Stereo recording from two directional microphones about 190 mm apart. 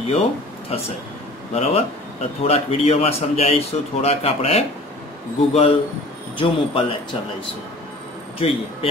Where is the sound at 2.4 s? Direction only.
30° left (ahead or behind).